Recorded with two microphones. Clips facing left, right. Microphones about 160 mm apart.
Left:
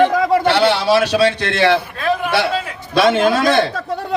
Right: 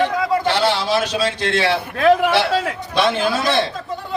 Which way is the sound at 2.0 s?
70° right (ahead or behind).